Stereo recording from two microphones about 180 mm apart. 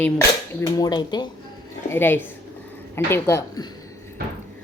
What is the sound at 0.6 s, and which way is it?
Dishes, 20° left (ahead or behind).